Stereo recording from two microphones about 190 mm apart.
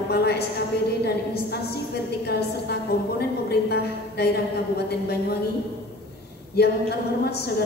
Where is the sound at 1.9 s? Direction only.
55° left (ahead or behind).